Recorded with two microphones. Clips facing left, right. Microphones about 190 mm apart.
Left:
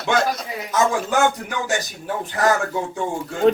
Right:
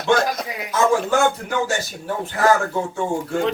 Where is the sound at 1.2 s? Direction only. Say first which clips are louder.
Right 1 dB; 15° left (ahead or behind).